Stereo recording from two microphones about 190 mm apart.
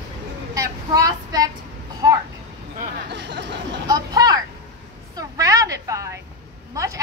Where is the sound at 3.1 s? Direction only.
65° right (ahead or behind).